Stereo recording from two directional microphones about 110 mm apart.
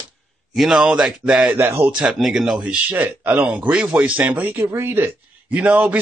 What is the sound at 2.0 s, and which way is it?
A man's voice, 5° right (ahead or behind).